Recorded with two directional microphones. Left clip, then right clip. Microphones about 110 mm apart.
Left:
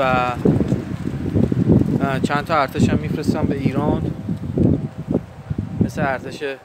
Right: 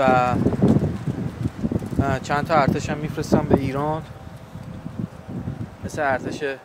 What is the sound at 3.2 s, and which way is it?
Speech, 5° right (ahead or behind).